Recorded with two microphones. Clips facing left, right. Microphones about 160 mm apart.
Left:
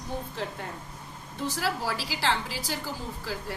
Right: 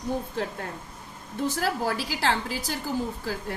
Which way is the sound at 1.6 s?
50° right (ahead or behind).